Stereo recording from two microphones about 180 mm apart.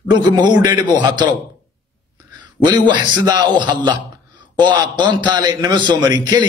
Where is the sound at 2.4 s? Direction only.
25° right (ahead or behind).